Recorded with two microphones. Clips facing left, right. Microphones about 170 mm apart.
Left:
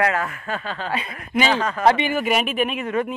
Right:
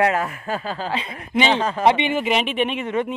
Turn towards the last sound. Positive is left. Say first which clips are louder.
# even
turn(degrees=-25)  # may be behind; listen again after turning